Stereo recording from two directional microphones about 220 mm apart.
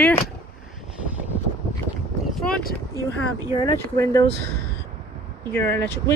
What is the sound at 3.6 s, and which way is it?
Speech, 15° left (ahead or behind).